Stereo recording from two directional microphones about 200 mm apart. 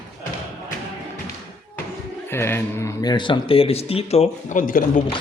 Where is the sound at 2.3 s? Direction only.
10° left (ahead or behind); by 5.0 s 45° left (ahead or behind).